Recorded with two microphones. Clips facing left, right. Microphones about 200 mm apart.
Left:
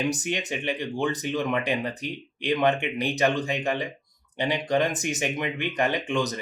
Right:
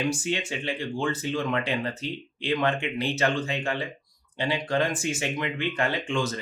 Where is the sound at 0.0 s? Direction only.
20° left (ahead or behind).